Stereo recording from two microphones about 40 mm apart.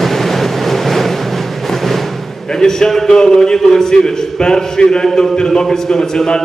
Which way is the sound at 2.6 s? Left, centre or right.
Centre.